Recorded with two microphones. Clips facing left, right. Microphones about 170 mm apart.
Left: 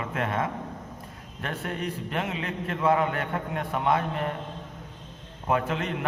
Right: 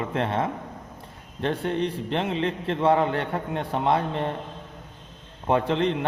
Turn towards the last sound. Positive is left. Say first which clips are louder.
# right 5 dB
turn(degrees=-30)  # may be behind; listen again after turning